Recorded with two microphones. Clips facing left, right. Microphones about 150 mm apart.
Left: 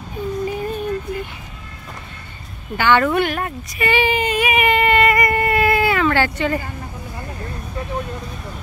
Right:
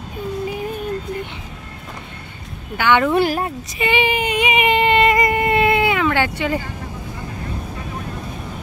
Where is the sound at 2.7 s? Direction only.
10° right (ahead or behind).